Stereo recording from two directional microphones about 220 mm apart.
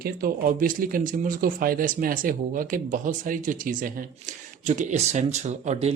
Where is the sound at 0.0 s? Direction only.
40° right (ahead or behind).